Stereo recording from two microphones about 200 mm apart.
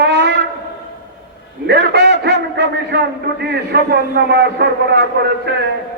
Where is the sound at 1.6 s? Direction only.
55° right (ahead or behind).